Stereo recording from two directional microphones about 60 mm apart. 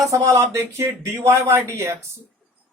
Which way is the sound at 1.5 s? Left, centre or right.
Right.